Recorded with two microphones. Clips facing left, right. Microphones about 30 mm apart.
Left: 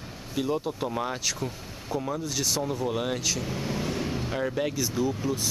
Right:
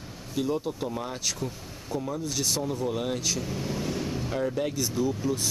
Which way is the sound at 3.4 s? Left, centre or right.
Centre.